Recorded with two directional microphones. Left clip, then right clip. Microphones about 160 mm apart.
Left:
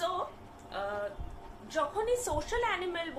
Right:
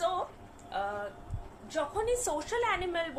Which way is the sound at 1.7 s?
30° right (ahead or behind).